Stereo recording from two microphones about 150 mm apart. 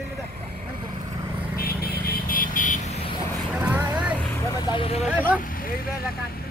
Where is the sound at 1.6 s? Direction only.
85° left; by 3.0 s 60° left (ahead or behind).